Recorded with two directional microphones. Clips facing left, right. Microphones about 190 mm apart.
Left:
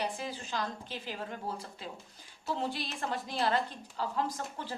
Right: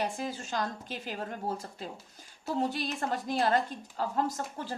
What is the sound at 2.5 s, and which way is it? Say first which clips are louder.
A woman's voice: right 6 dB; 45° right (ahead or behind).